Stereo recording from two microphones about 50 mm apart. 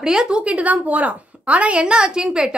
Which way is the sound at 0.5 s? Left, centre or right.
Right.